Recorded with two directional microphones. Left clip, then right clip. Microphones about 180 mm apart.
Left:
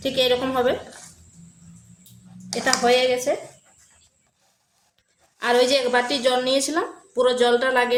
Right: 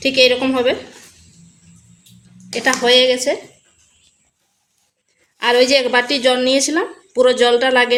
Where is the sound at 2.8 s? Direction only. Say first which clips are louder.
Right 6 dB; 35° right (ahead or behind).